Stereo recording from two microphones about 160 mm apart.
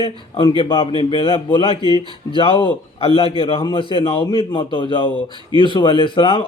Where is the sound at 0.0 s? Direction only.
30° left (ahead or behind).